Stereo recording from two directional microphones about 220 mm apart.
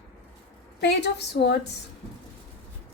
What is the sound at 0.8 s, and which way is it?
Speech, 50° left (ahead or behind).